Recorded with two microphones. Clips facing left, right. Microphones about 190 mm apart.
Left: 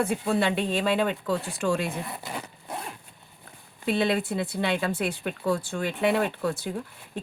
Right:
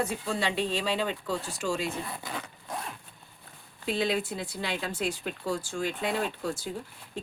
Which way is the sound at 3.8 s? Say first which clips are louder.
Left 4 dB; 60° left (ahead or behind).